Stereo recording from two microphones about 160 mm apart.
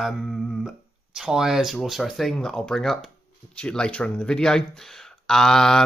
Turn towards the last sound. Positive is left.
turn(degrees=5)  # may be behind; listen again after turning